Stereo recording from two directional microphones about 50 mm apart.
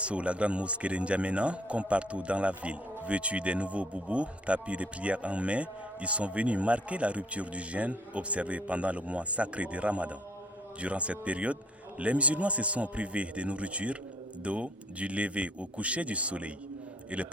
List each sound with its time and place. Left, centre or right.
0.0 s speech: right